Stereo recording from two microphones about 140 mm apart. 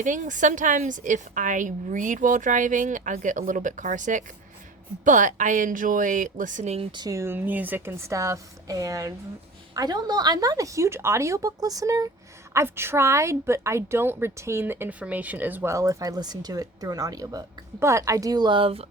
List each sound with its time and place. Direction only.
0.0 s a woman's voice: 65° right (ahead or behind)
6.9 s a woman's voice: 25° right (ahead or behind); by 18.9 s 40° right (ahead or behind)